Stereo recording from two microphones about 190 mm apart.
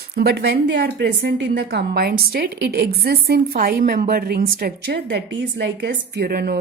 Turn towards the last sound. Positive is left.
turn(degrees=-50)  # may be behind; listen again after turning